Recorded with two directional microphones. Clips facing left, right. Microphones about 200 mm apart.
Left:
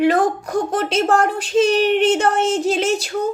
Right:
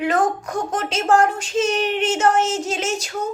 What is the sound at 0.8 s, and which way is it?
Speech, 60° left (ahead or behind).